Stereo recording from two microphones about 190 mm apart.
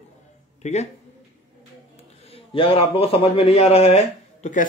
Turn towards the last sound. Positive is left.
turn(degrees=40)  # may be behind; listen again after turning